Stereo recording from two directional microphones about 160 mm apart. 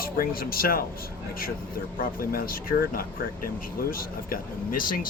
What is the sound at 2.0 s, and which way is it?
Speech, 65° left (ahead or behind).